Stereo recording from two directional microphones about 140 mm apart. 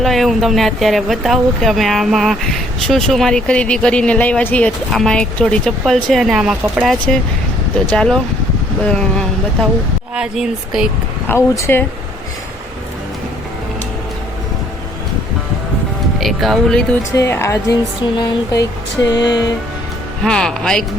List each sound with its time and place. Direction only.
0.0 s speech: centre (ahead or behind)
7.9 s speech: 5° left (ahead or behind)
11.3 s speech: 20° left (ahead or behind)
16.2 s speech: centre (ahead or behind)
17.2 s speech: 20° left (ahead or behind)
19.1 s speech: 30° left (ahead or behind)
20.2 s speech: 5° left (ahead or behind)